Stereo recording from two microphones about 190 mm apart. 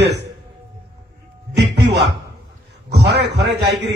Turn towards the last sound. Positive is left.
turn(degrees=-60)  # may be behind; listen again after turning